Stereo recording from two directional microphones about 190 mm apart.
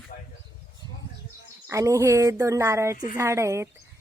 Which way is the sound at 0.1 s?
45° left (ahead or behind).